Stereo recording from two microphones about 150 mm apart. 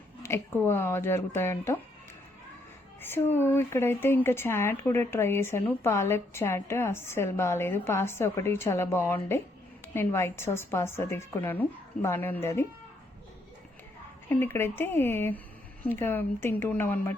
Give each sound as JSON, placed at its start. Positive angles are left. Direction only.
{"t": 0.2, "sound": "speech", "side_deg": 15}
{"t": 3.0, "sound": "speech", "side_deg": 15}
{"t": 14.3, "sound": "speech", "side_deg": 15}